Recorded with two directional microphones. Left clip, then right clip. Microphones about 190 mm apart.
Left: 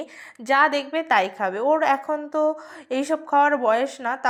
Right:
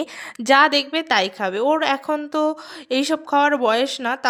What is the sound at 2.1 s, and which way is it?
Speech, 50° right (ahead or behind).